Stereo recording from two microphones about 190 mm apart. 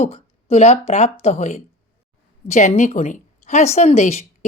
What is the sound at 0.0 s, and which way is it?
Speech, 35° left (ahead or behind).